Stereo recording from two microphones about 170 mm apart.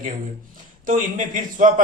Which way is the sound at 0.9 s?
50° right (ahead or behind).